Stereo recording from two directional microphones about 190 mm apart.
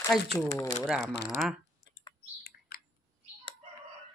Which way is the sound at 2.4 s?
50° left (ahead or behind).